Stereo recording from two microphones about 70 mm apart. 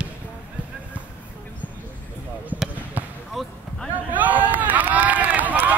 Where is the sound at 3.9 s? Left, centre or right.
Right.